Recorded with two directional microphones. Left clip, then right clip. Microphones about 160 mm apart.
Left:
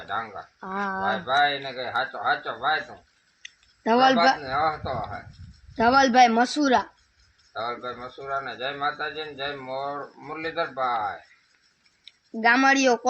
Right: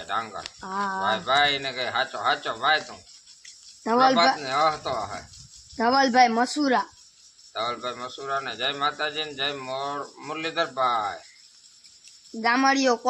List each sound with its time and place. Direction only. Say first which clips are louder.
0.1 s speech: right 1 dB; 25° right (ahead or behind)
0.6 s speech: right 1 dB; 40° left (ahead or behind)
1.6 s speech: right 1 dB; 30° right (ahead or behind)
3.8 s speech: left 1 dB; 40° left (ahead or behind)
4.4 s speech: right 2 dB; 30° right (ahead or behind)
5.7 s speech: left 2 dB; 45° left (ahead or behind)
7.5 s speech: right 2 dB; 30° right (ahead or behind)
12.4 s speech: left 2 dB; 45° left (ahead or behind)